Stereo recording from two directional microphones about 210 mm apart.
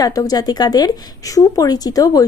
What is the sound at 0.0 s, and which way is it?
Speech, 20° left (ahead or behind).